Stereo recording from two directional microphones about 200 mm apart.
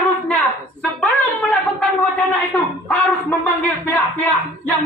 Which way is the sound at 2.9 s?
10° left (ahead or behind).